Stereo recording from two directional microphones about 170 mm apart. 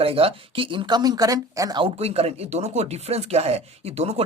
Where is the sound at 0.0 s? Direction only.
35° right (ahead or behind).